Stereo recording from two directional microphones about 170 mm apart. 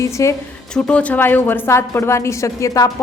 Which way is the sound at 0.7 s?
5° left (ahead or behind).